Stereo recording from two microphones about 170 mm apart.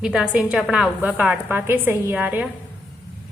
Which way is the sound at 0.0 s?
5° right (ahead or behind).